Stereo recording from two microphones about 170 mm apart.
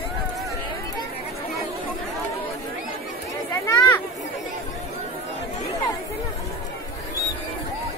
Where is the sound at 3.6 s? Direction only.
20° left (ahead or behind).